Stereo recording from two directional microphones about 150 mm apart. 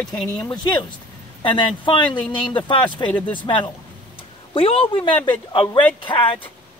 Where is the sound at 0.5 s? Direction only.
30° left (ahead or behind).